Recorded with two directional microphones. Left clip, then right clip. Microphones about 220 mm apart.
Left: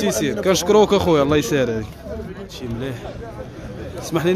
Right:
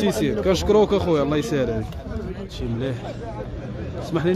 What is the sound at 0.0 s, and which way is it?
A man's voice, 5° left (ahead or behind).